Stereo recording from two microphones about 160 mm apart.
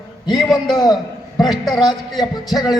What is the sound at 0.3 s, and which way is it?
Speech, centre (ahead or behind).